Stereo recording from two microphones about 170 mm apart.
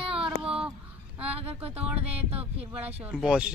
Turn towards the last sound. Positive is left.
turn(degrees=-5)  # may be behind; listen again after turning